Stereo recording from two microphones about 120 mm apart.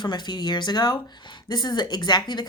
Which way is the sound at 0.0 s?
40° left (ahead or behind).